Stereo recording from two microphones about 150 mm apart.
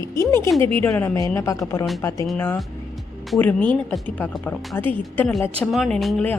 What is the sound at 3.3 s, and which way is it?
Speech, 10° left (ahead or behind).